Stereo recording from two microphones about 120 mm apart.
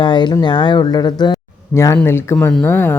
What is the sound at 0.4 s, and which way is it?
Speech, 40° left (ahead or behind).